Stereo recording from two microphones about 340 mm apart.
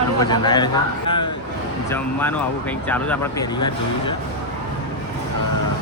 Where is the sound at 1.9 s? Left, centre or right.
Centre.